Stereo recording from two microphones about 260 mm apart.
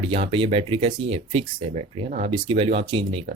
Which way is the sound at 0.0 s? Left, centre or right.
Right.